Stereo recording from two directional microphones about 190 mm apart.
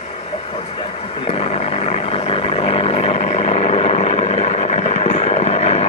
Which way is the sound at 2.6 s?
30° left (ahead or behind).